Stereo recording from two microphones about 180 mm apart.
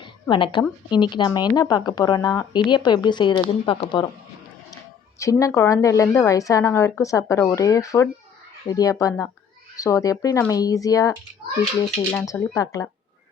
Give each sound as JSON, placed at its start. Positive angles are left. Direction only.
{"t": 0.0, "sound": "a sound", "side_deg": 25}
{"t": 0.9, "sound": "speech", "side_deg": 25}
{"t": 5.2, "sound": "a woman's voice", "side_deg": 15}
{"t": 12.1, "sound": "speech", "side_deg": 20}